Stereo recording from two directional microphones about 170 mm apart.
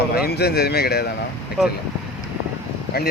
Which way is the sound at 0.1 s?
70° left (ahead or behind).